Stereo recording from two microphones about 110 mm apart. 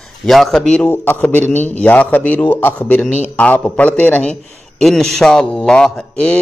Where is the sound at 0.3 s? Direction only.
5° left (ahead or behind).